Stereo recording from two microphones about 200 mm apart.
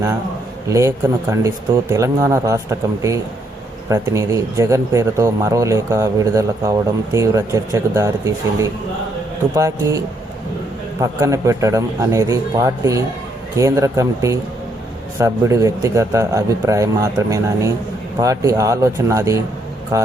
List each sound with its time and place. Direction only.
0.7 s speech: 15° right (ahead or behind)
11.0 s speech: 15° right (ahead or behind)